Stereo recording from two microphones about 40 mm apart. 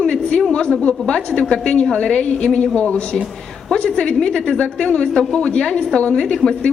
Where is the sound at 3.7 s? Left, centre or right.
Centre.